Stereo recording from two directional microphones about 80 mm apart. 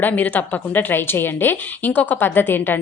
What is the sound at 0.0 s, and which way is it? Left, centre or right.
Speech, centre.